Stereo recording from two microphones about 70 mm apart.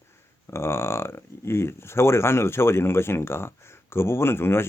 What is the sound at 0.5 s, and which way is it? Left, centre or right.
Speech, left.